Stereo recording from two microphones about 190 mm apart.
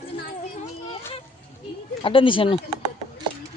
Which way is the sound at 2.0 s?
25° left (ahead or behind).